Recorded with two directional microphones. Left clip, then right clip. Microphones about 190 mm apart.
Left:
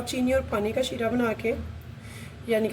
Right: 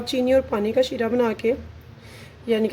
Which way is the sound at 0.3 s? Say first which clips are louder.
Right 5 dB; 50° right (ahead or behind).